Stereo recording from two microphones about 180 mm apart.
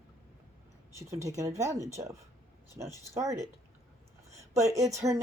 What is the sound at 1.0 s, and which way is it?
Speech, 15° right (ahead or behind).